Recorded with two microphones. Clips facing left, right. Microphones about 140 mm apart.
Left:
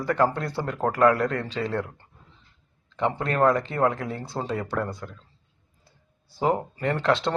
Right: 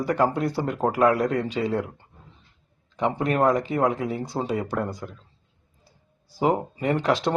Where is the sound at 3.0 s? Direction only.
15° right (ahead or behind).